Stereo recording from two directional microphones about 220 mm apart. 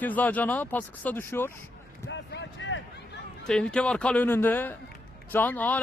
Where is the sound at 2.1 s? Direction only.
55° left (ahead or behind).